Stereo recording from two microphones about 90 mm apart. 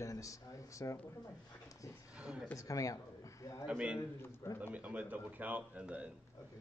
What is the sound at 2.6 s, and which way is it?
Speech, 40° left (ahead or behind).